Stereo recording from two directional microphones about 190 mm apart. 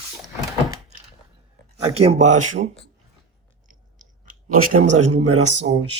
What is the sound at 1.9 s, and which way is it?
Speech, 35° right (ahead or behind).